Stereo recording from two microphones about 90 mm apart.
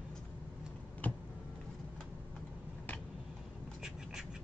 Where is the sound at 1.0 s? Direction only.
20° left (ahead or behind).